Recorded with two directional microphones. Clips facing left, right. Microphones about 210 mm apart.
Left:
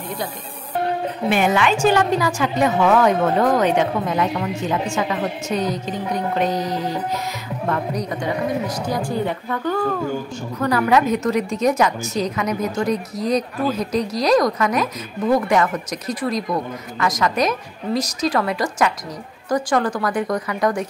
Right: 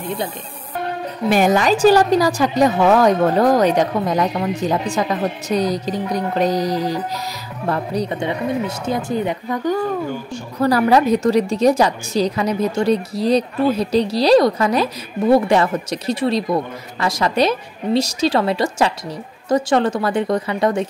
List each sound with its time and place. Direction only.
1.3 s a woman's voice: 40° right (ahead or behind); by 9.8 s 15° right (ahead or behind)
10.6 s a woman's voice: 35° right (ahead or behind)